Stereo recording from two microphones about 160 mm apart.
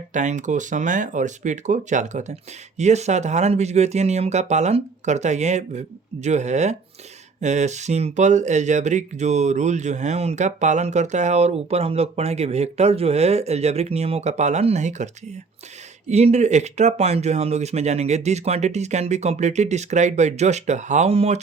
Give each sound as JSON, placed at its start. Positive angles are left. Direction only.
{"t": 0.1, "sound": "speech", "side_deg": -50}